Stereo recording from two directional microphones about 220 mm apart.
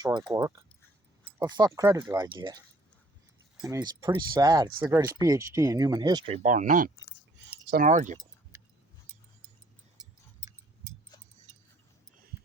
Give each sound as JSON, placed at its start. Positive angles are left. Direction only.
{"t": 0.3, "sound": "speech", "side_deg": -15}
{"t": 3.6, "sound": "speech", "side_deg": -15}